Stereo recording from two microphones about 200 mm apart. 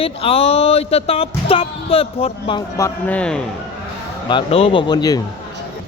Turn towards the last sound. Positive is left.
turn(degrees=20)  # may be behind; listen again after turning